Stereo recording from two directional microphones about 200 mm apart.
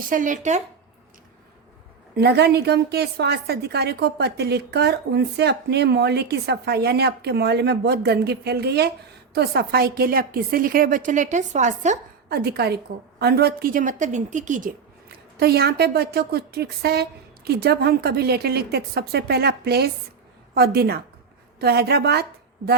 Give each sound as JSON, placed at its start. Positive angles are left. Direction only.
{"t": 0.1, "sound": "a woman's voice", "side_deg": -40}
{"t": 2.1, "sound": "a woman's voice", "side_deg": -55}
{"t": 12.3, "sound": "a woman's voice", "side_deg": -55}
{"t": 15.1, "sound": "a woman's voice", "side_deg": -50}